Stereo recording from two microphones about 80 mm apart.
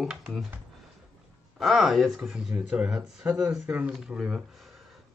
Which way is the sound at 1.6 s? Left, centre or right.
Centre.